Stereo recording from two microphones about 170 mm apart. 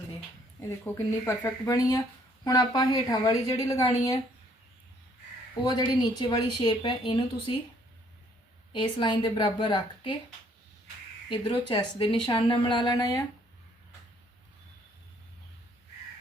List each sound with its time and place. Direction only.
0.6 s speech: 15° left (ahead or behind)
5.6 s speech: 25° left (ahead or behind)
8.7 s speech: 25° left (ahead or behind)
11.4 s speech: 30° left (ahead or behind)